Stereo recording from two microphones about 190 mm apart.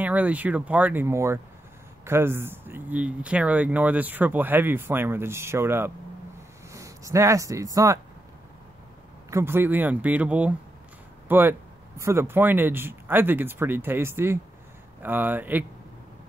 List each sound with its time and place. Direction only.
0.0 s speech: 10° right (ahead or behind)
9.3 s speech: 10° right (ahead or behind)